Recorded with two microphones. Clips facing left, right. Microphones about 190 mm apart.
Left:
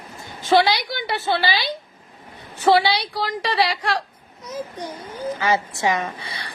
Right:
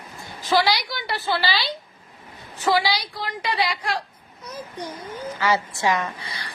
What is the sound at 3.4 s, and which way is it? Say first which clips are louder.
Speech: left 2 dB; 30° left (ahead or behind).